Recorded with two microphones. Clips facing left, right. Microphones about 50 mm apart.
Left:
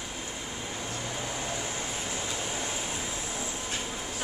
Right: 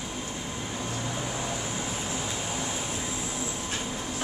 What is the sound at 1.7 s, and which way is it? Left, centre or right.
Vehicle, centre.